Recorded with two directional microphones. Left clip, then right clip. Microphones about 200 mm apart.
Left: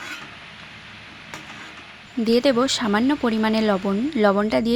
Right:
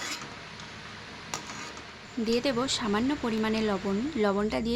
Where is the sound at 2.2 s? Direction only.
40° left (ahead or behind).